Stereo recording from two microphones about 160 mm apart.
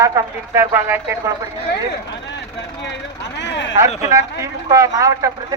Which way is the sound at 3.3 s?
90° left.